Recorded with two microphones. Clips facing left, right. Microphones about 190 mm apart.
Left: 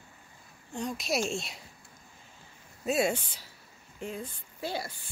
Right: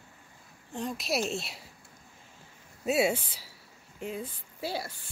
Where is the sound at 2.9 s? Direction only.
5° right (ahead or behind).